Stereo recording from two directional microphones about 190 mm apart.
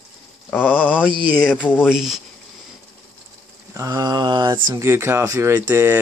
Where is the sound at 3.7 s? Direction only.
20° right (ahead or behind).